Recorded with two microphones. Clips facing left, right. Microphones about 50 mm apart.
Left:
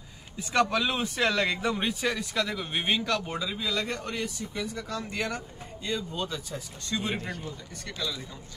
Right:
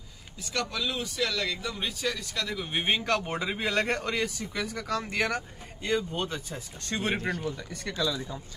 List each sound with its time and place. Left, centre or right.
0.4 s speech: left
2.4 s a man's voice: centre
2.9 s speech: right
3.3 s speech: right
6.8 s speech: right